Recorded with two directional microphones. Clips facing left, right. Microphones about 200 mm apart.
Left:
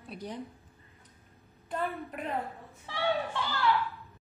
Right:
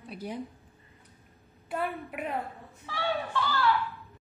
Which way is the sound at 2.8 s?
20° left (ahead or behind).